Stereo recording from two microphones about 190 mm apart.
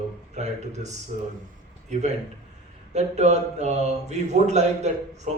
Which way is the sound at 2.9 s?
35° right (ahead or behind).